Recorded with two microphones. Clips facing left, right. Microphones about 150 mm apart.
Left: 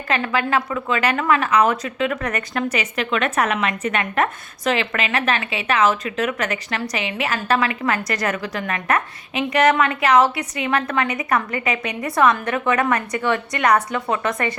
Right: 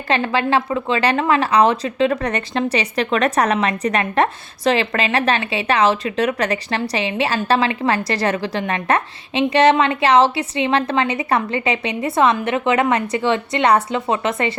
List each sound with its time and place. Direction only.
0.1 s a woman's voice: 30° right (ahead or behind)